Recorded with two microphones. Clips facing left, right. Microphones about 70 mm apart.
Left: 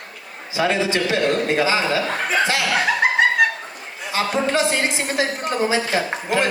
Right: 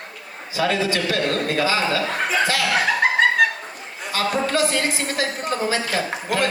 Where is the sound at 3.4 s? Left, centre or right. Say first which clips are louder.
Even; centre.